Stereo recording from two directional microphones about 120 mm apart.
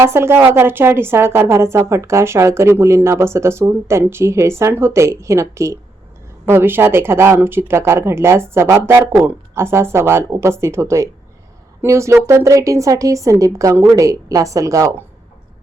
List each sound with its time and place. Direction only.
0.0 s speech: 20° right (ahead or behind)